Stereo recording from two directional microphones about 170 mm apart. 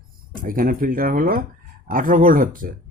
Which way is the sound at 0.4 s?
55° right (ahead or behind).